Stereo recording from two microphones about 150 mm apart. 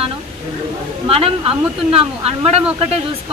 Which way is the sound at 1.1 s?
40° right (ahead or behind).